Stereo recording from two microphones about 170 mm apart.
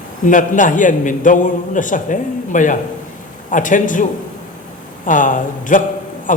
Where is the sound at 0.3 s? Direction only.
50° left (ahead or behind).